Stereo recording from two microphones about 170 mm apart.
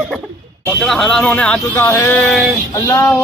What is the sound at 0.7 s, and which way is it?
Speech, centre (ahead or behind).